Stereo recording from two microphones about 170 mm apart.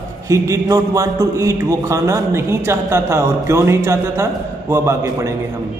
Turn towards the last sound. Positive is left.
turn(degrees=-15)  # may be behind; listen again after turning